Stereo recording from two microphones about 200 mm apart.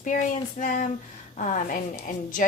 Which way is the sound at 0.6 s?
40° left (ahead or behind).